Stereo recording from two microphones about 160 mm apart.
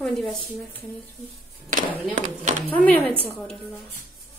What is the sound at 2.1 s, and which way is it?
Speech, 50° right (ahead or behind).